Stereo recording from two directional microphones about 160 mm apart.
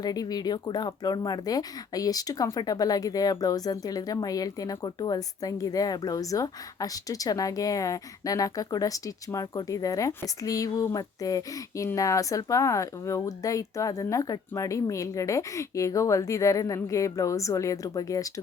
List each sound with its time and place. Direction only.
0.0 s speech: 25° left (ahead or behind)